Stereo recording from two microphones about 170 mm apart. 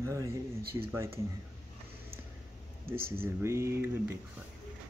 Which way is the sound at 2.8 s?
15° right (ahead or behind).